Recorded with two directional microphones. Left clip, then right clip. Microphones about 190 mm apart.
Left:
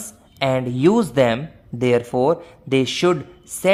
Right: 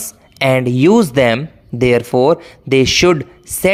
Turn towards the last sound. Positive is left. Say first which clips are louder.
# right 7 dB
turn(degrees=-25)  # may be behind; listen again after turning